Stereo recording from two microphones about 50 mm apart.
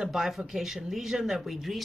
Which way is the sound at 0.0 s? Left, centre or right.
Centre.